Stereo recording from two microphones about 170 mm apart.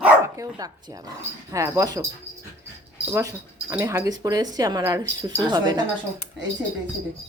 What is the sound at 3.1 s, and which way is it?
A woman's voice, 15° right (ahead or behind).